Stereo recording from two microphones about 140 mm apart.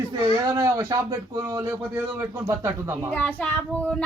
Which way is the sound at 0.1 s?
30° right (ahead or behind).